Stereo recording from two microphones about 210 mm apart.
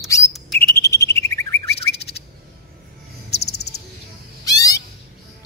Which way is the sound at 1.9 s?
50° left (ahead or behind).